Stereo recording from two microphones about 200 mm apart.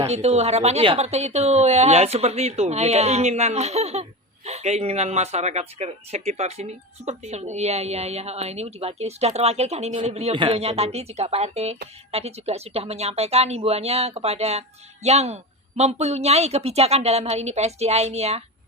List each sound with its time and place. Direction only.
0.0 s speech: 30° right (ahead or behind)